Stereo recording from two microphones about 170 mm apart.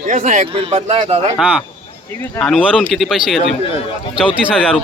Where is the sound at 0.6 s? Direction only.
35° right (ahead or behind).